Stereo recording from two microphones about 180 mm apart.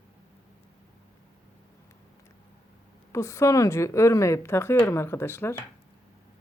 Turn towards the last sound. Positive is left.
turn(degrees=15)  # may be behind; listen again after turning